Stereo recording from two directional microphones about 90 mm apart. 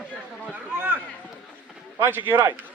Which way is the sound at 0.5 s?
15° right (ahead or behind).